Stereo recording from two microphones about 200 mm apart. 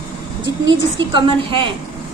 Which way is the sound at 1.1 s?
25° right (ahead or behind).